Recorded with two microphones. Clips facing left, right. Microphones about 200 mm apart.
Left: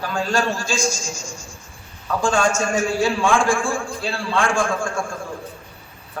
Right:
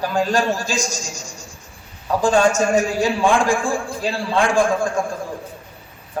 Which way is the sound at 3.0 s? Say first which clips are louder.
Right 1 dB; 20° right (ahead or behind).